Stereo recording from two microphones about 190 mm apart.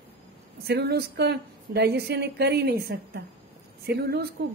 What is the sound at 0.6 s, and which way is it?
A woman's voice, 60° right (ahead or behind).